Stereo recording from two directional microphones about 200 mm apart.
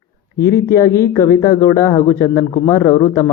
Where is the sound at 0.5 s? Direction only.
15° left (ahead or behind).